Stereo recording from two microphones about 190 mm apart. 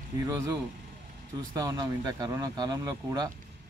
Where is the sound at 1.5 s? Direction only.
20° right (ahead or behind).